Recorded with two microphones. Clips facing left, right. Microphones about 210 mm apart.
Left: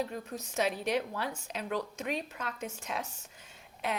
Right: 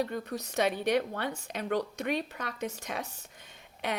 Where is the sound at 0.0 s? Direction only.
70° right (ahead or behind).